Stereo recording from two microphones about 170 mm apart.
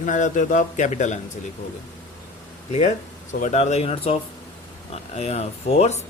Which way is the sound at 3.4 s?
40° left (ahead or behind).